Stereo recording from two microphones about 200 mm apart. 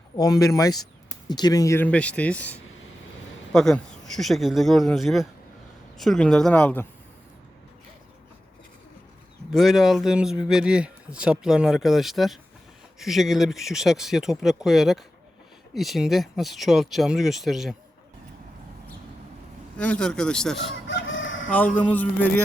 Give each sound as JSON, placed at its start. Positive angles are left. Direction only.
{"t": 0.2, "sound": "speech", "side_deg": 15}
{"t": 9.5, "sound": "speech", "side_deg": 0}
{"t": 19.7, "sound": "speech", "side_deg": 5}
{"t": 20.7, "sound": "chicken", "side_deg": 70}
{"t": 21.5, "sound": "speech", "side_deg": 10}